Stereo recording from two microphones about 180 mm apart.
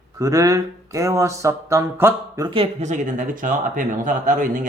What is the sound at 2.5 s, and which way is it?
Speech, 35° right (ahead or behind).